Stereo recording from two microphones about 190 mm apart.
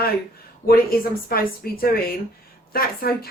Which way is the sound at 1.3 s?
50° left (ahead or behind).